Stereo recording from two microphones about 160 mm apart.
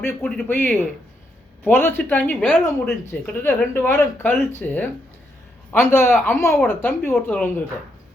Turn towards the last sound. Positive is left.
turn(degrees=10)  # may be behind; listen again after turning